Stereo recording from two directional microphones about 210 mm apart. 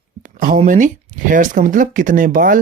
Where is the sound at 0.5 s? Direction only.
35° right (ahead or behind).